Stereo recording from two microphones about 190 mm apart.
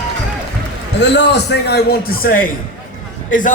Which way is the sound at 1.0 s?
65° left (ahead or behind).